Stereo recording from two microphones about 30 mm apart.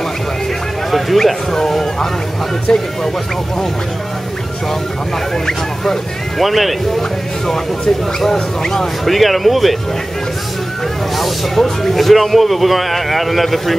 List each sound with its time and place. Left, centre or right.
0.9 s speech: centre
2.7 s speech: centre
5.5 s speech: centre
7.0 s speech: centre
9.0 s speech: centre
11.1 s speech: centre